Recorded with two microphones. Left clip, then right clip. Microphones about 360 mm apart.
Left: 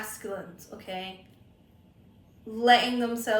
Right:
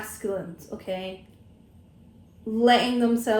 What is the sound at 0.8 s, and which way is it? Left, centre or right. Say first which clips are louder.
Speech: right 5 dB; centre.